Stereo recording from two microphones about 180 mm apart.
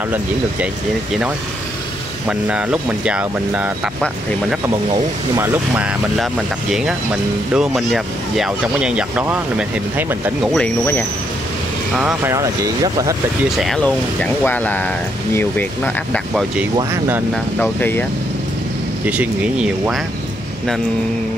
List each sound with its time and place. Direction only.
2.2 s speech: 5° right (ahead or behind)
5.3 s speech: 10° right (ahead or behind)
10.4 s speech: 5° left (ahead or behind)
12.0 s speech: 5° right (ahead or behind)
12.4 s speech: 20° right (ahead or behind)
13.6 s speech: 5° left (ahead or behind)
17.6 s speech: 10° left (ahead or behind)
19.0 s speech: 5° right (ahead or behind)